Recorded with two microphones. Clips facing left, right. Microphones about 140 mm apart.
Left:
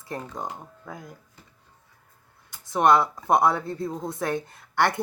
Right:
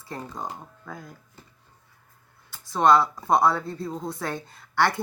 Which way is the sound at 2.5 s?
20° left (ahead or behind).